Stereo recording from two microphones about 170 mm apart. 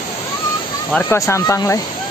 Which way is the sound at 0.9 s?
15° left (ahead or behind).